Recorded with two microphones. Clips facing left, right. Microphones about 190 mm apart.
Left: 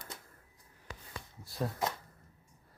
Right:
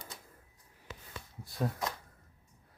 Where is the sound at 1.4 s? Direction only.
Centre (ahead or behind).